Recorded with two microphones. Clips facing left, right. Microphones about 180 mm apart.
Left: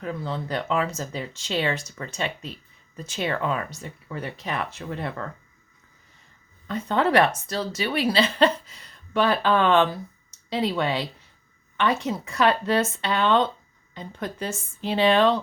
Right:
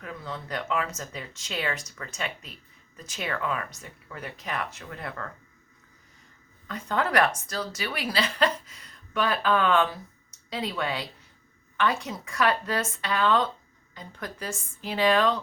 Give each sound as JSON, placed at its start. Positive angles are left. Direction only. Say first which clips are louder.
{"t": 0.0, "sound": "speech", "louder": "left 7 dB", "side_deg": 30}
{"t": 6.7, "sound": "speech", "louder": "left 5 dB", "side_deg": 25}